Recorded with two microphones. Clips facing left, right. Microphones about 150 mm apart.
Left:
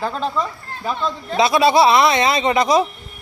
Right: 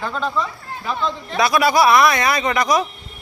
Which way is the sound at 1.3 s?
25° left (ahead or behind).